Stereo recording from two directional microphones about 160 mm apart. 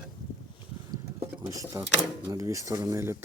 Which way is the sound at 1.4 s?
20° right (ahead or behind).